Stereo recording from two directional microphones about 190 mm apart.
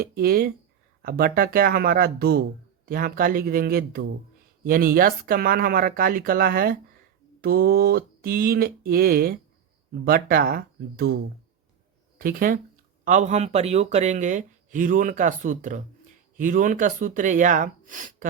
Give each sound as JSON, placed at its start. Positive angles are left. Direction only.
{"t": 0.0, "sound": "speech", "side_deg": -50}
{"t": 12.2, "sound": "speech", "side_deg": -50}